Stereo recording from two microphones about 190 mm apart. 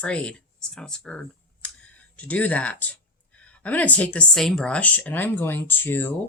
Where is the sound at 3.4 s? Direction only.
10° left (ahead or behind).